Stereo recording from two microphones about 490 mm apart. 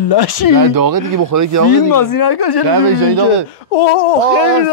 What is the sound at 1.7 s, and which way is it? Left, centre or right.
Speech, left.